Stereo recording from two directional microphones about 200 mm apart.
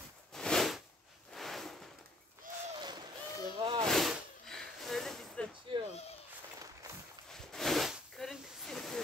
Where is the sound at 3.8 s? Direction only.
Centre (ahead or behind).